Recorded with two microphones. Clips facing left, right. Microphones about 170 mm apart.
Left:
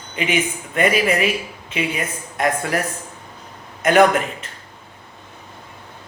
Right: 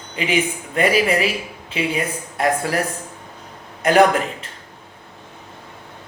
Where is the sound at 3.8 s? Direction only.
35° right (ahead or behind).